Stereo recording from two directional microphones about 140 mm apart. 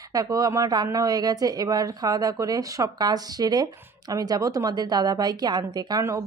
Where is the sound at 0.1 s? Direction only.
25° right (ahead or behind).